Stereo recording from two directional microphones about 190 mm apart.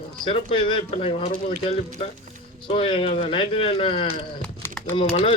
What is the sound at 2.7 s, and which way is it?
A man's voice, 30° left (ahead or behind).